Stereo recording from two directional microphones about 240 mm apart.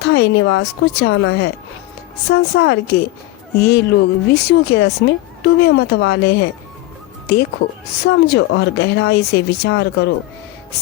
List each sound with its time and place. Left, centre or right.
0.0 s speech: left
8.0 s speech: left